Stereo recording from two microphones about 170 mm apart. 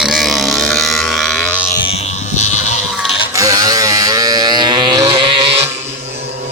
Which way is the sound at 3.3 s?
20° right (ahead or behind).